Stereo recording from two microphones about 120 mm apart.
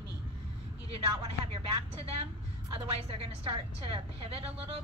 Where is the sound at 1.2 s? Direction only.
55° right (ahead or behind).